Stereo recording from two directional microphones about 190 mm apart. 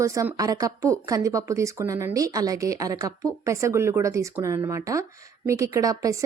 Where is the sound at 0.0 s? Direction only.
15° right (ahead or behind).